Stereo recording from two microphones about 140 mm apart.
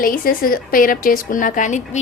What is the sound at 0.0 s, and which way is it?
A woman's voice, 90° left.